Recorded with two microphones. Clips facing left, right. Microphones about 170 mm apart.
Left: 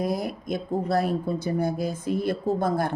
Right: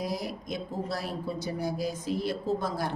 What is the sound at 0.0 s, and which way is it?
A woman's voice, 55° left (ahead or behind).